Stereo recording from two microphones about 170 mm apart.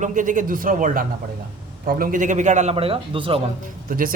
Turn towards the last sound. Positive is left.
turn(degrees=-55)  # may be behind; listen again after turning